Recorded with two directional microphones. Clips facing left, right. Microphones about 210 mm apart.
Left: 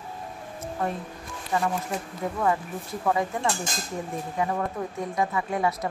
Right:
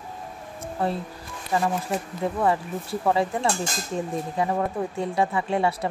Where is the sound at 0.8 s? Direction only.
30° right (ahead or behind).